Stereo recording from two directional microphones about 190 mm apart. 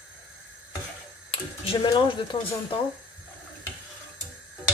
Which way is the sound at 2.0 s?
30° left (ahead or behind).